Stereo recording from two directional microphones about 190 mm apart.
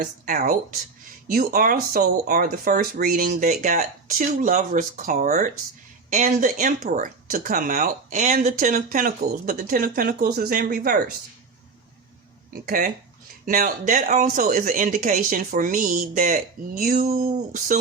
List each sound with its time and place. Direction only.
0.0 s speech: 50° right (ahead or behind)
12.6 s speech: 50° right (ahead or behind)